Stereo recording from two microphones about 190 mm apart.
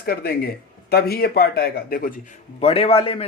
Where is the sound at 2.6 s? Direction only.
30° left (ahead or behind).